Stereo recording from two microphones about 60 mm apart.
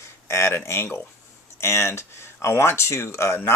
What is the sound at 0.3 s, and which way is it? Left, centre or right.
Speech, left.